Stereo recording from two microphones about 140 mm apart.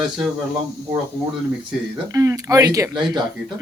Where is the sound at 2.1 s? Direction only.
25° right (ahead or behind).